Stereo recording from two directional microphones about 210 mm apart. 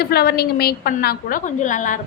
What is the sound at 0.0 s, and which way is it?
A woman's voice, 50° left (ahead or behind).